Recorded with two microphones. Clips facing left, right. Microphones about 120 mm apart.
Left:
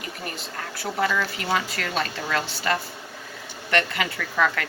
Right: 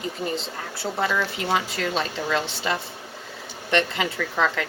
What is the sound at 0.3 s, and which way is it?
Speech, 25° right (ahead or behind).